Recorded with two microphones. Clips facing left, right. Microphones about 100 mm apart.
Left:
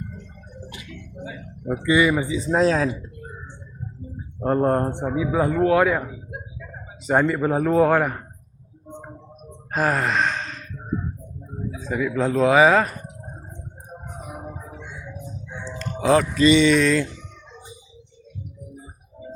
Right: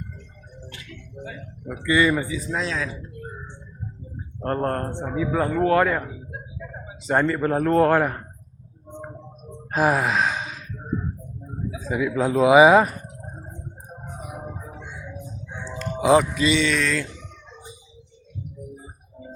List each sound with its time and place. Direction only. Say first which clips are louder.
1.2 s a man's voice: left 1 dB; 5° left (ahead or behind)
1.6 s speech: left 2 dB; 25° left (ahead or behind)
2.5 s speech: left 12 dB; 40° left (ahead or behind)
4.4 s speech: left 5 dB; 10° left (ahead or behind)
7.1 s a man's voice: left 1 dB; 5° left (ahead or behind)
9.7 s gasp: right 1 dB; 5° right (ahead or behind)
11.7 s a man's voice: even; 5° right (ahead or behind)
15.2 s chicken: left 1 dB; 5° right (ahead or behind)
16.4 s a man's voice: left 6 dB; centre (ahead or behind)